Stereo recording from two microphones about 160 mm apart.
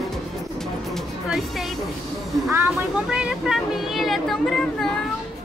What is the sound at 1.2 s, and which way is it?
Speech, centre (ahead or behind).